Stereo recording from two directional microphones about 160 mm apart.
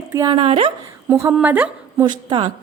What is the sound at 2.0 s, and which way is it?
Speech, 30° right (ahead or behind).